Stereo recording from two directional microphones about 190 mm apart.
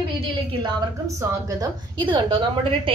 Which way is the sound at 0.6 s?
15° right (ahead or behind).